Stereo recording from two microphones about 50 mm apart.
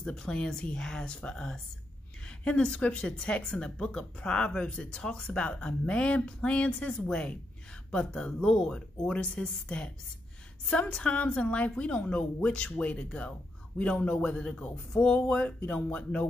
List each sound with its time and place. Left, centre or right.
0.0 s speech: centre
2.2 s a woman's voice: left